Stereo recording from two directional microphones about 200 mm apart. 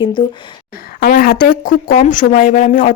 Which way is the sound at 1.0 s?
45° left (ahead or behind).